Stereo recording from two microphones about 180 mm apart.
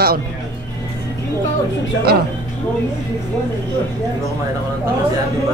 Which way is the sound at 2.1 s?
60° right (ahead or behind).